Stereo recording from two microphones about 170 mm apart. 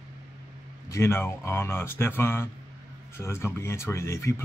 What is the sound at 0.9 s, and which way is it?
Speech, 15° left (ahead or behind).